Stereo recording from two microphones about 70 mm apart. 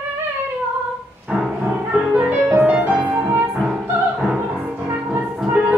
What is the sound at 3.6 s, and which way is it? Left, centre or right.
Opera, centre.